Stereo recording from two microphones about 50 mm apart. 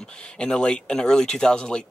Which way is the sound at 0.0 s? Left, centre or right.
Centre.